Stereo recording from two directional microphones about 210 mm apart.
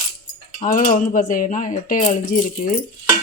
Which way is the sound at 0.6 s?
40° left (ahead or behind).